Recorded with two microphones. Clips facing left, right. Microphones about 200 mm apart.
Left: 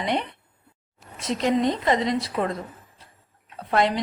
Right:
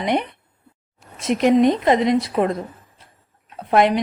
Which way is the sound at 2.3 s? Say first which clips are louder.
Right 6 dB; 40° right (ahead or behind).